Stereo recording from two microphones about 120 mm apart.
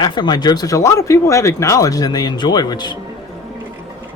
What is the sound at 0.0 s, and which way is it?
Speech, 35° left (ahead or behind).